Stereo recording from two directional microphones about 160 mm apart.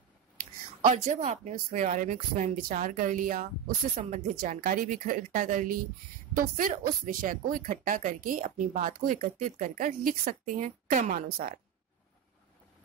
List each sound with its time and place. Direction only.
1.2 s speech: 45° right (ahead or behind)
4.1 s speech: 50° right (ahead or behind); by 11.5 s 65° right (ahead or behind)